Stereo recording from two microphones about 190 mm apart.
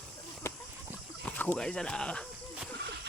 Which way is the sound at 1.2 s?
5° left (ahead or behind).